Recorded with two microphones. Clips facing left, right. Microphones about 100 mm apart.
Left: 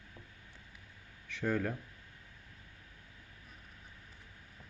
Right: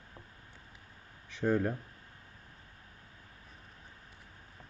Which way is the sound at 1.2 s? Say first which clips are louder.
Right 4 dB; 20° right (ahead or behind).